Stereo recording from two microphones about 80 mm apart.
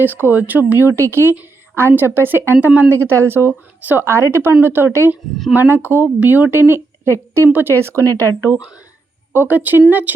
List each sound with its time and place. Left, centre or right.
0.0 s a woman's voice: right
9.3 s a woman's voice: right